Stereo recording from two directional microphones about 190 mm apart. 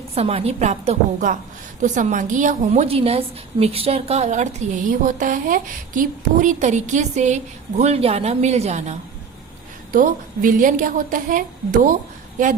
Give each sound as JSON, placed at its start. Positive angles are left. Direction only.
{"t": 0.1, "sound": "a woman's voice", "side_deg": -30}